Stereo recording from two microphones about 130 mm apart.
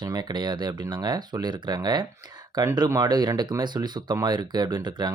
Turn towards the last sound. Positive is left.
turn(degrees=-35)  # may be behind; listen again after turning